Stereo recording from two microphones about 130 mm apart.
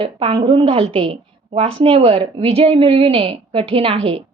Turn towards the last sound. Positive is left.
turn(degrees=-45)  # may be behind; listen again after turning